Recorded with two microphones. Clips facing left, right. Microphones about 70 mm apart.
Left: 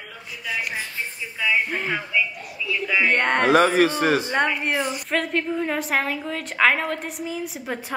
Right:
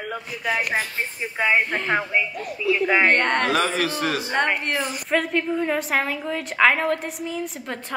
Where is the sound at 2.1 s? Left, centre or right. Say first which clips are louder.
Right 1 dB; right.